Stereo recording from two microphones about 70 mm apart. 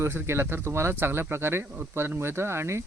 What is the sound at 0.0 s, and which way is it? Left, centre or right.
Speech, right.